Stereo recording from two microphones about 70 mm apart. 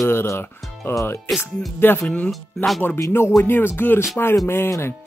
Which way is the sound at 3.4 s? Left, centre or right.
Left.